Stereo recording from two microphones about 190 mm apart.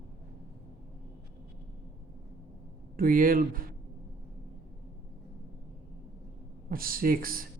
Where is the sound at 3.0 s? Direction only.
50° right (ahead or behind).